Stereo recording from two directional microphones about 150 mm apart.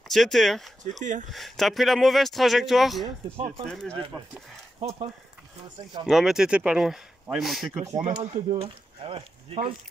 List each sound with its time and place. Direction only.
0.1 s speech: centre (ahead or behind)
3.3 s speech: 40° right (ahead or behind)
3.6 s speech: 5° left (ahead or behind)
4.7 s speech: 40° right (ahead or behind)
6.0 s speech: 5° right (ahead or behind)
7.8 s speech: 45° right (ahead or behind)